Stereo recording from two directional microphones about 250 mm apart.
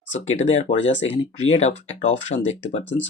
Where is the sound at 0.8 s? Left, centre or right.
Left.